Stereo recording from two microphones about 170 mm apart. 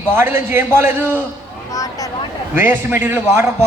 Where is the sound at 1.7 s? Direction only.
20° left (ahead or behind).